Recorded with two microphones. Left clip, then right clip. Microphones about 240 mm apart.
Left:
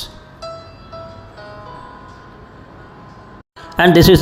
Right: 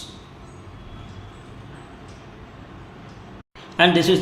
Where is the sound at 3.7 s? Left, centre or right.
Left.